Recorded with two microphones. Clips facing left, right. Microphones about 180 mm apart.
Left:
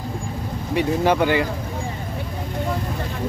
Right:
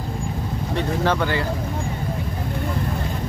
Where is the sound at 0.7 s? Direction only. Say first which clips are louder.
Left 4 dB; 15° left (ahead or behind).